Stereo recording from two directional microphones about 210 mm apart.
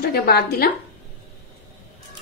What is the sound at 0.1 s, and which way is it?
Speech, 45° left (ahead or behind).